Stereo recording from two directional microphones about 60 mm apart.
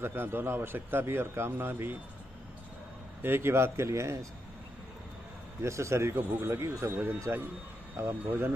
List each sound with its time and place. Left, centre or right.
0.0 s speech: right
3.2 s a man's voice: right
5.6 s a man's voice: right